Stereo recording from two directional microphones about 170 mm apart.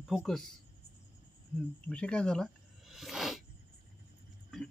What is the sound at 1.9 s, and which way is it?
Snake, 5° left (ahead or behind).